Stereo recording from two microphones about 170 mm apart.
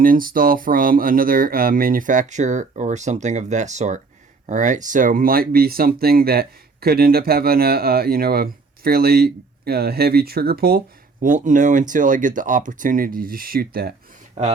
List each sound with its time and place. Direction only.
0.0 s speech: 55° right (ahead or behind)